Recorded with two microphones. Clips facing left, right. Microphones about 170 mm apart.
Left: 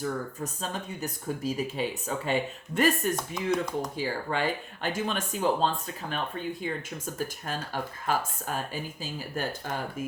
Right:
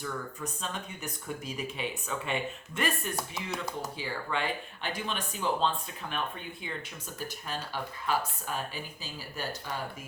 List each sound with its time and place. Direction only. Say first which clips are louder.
0.0 s speech: left 5 dB; 40° left (ahead or behind)
3.2 s speech: left 7 dB; 5° right (ahead or behind)
3.9 s speech: left 4 dB; 40° left (ahead or behind)